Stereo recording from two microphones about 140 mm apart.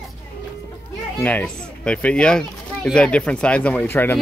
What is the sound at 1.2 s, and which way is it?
Speech, 10° left (ahead or behind).